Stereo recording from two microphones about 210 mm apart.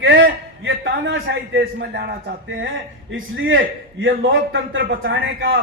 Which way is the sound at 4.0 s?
65° right (ahead or behind).